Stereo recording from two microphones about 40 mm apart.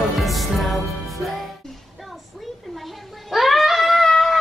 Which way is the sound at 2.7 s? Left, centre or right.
Centre.